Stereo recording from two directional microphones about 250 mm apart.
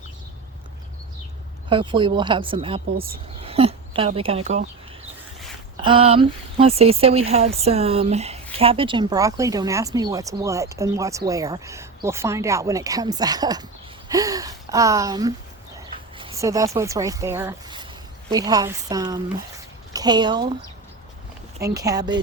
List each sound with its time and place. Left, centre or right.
1.7 s speech: centre
5.7 s speech: right
21.6 s speech: centre